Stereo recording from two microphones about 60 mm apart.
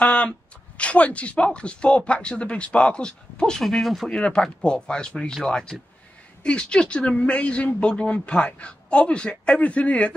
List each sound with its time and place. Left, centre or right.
0.0 s a sound: left
0.7 s speech: left
3.6 s speech: centre
4.2 s speech: centre